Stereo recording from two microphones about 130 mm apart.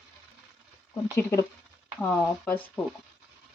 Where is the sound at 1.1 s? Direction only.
25° left (ahead or behind).